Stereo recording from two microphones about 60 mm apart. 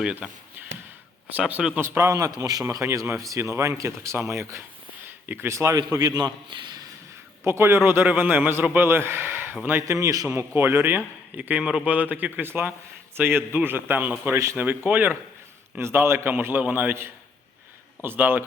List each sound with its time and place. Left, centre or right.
0.0 s speech: centre
1.4 s speech: right
2.0 s speech: right
2.4 s a man's voice: right
3.2 s speech: right
5.2 s speech: right
5.5 s a man's voice: right
7.4 s a man's voice: right
7.9 s a man's voice: right
9.8 s speech: right
10.3 s a man's voice: right
11.3 s speech: right
12.5 s a man's voice: right
15.8 s a man's voice: right